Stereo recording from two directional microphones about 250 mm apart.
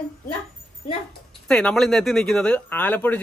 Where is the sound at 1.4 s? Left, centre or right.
Centre.